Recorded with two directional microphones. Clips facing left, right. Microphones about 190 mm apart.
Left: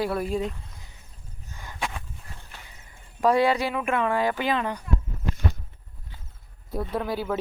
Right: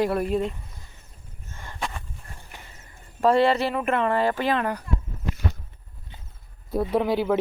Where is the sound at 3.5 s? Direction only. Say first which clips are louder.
Right 2 dB; centre (ahead or behind).